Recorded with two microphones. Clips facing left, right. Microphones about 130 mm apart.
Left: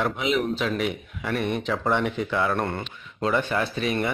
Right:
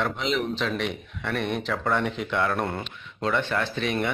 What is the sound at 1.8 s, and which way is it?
Speech, 20° left (ahead or behind).